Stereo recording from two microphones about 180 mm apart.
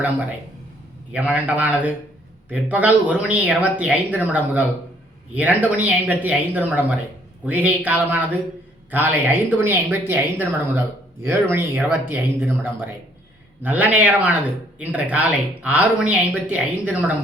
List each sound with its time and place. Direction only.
1.1 s a woman's voice: 5° right (ahead or behind)